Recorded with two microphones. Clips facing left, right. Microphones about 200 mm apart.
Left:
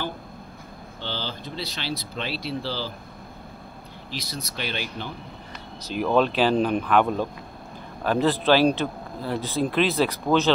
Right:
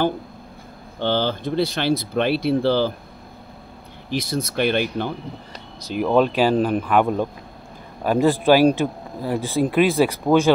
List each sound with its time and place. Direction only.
0.9 s speech: 55° right (ahead or behind)
4.1 s speech: 50° right (ahead or behind)
6.0 s a man's voice: 10° right (ahead or behind)